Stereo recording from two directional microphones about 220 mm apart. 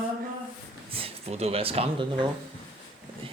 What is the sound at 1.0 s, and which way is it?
Speech, 25° right (ahead or behind).